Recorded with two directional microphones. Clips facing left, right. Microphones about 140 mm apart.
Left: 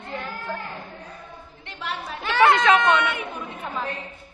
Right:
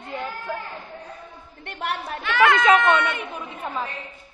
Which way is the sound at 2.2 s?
30° left (ahead or behind).